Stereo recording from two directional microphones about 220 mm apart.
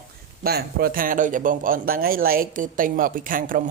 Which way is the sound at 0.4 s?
45° right (ahead or behind).